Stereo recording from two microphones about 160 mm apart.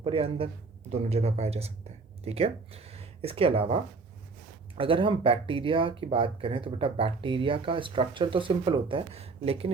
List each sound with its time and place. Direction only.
0.0 s speech: 35° right (ahead or behind)